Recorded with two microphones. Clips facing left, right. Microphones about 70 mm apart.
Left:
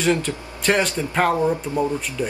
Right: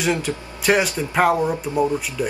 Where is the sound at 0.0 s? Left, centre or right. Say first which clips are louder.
Left 1 dB; centre.